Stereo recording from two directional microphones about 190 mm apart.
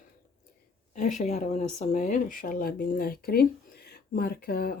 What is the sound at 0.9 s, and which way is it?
Speech, 40° left (ahead or behind).